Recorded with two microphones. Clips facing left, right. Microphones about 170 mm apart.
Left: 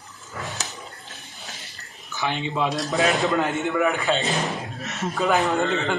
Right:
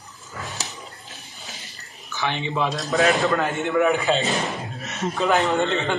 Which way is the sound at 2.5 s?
15° left (ahead or behind).